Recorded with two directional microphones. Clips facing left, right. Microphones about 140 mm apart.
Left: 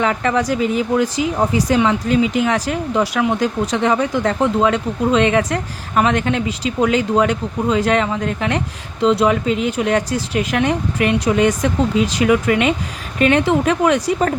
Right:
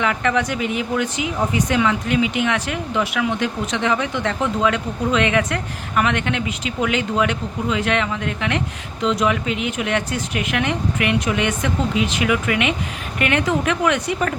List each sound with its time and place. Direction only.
0.0 s speech: 35° left (ahead or behind)